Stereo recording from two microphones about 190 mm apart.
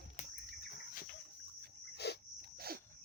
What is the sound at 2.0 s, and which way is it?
Cricket, 60° left (ahead or behind).